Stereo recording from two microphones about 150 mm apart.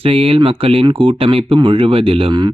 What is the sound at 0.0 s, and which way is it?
Speech, 40° right (ahead or behind).